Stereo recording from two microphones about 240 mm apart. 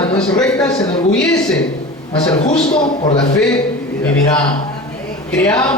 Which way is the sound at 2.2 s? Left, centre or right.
Centre.